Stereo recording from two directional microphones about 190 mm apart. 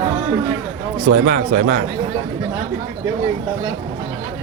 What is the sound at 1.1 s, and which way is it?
Speech, 45° right (ahead or behind).